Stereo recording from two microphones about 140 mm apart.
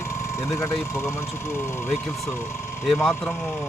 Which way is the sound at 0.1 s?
20° left (ahead or behind).